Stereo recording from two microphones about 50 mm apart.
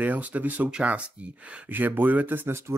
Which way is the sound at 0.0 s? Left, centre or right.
Right.